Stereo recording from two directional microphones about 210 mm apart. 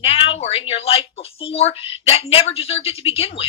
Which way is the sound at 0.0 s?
25° left (ahead or behind).